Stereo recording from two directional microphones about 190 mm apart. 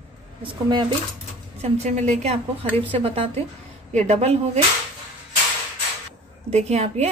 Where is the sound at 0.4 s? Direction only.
25° right (ahead or behind).